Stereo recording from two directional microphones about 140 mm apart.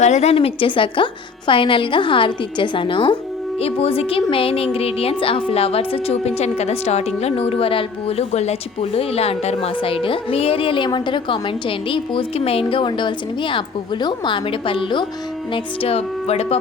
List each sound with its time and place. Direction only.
0.0 s a woman's voice: 55° left (ahead or behind)